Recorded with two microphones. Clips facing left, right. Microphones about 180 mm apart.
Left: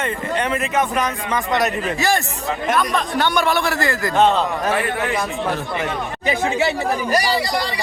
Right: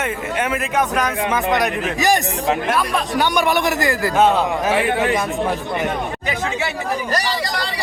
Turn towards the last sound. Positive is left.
turn(degrees=10)  # may be behind; listen again after turning